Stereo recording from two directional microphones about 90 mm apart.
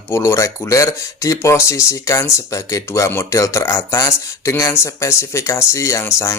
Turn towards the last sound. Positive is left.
turn(degrees=35)  # may be behind; listen again after turning